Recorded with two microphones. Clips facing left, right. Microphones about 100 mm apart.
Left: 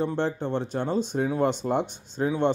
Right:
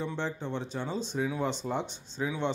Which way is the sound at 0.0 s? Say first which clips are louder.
Left 7 dB; 55° left (ahead or behind).